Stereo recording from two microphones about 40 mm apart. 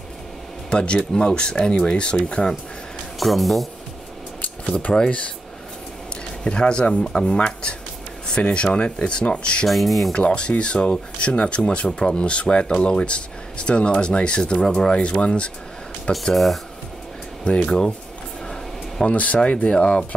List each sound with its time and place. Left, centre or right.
0.7 s speech: left
3.2 s speech: centre
4.9 s speech: left
6.4 s speech: left
9.7 s speech: centre
10.1 s speech: left
17.5 s speech: left
19.0 s speech: left